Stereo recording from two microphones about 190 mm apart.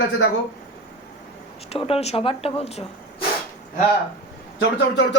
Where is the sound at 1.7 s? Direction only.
30° left (ahead or behind).